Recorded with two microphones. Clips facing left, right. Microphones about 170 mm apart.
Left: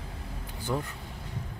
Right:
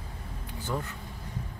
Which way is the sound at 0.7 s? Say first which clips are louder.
Left 2 dB; 15° left (ahead or behind).